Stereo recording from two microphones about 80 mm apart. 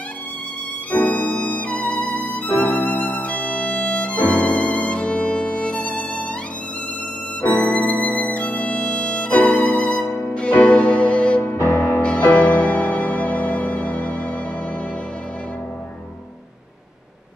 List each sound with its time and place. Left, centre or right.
0.9 s music: left
7.4 s music: centre
11.5 s music: left
12.0 s music: centre